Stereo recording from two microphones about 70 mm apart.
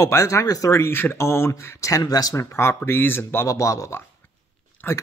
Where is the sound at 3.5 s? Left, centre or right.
Left.